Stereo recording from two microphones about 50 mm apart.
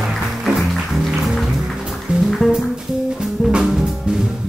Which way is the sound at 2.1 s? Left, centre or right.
Centre.